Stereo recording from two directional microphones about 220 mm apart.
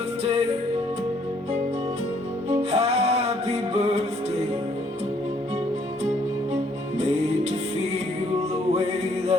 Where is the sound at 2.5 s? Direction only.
30° right (ahead or behind).